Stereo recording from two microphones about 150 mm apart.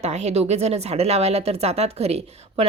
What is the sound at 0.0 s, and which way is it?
Speech, 50° right (ahead or behind).